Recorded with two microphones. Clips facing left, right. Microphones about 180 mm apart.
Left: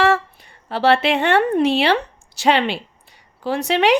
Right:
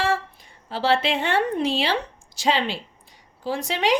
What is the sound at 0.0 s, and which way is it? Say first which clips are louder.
A woman's voice: left 7 dB; 65° left (ahead or behind).